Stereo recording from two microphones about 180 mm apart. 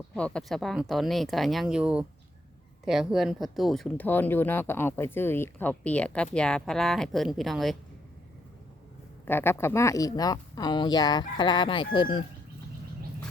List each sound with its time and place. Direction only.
0.1 s speech: 5° left (ahead or behind)
9.2 s speech: 10° left (ahead or behind)